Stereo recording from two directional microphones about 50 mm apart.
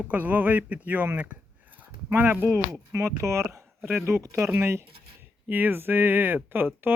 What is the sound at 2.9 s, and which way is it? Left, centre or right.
Speech, right.